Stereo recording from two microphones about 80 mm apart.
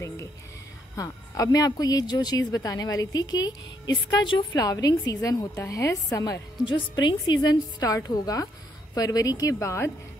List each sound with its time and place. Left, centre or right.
0.9 s a woman's voice: left
3.9 s a woman's voice: left
4.6 s a woman's voice: left
6.6 s a woman's voice: left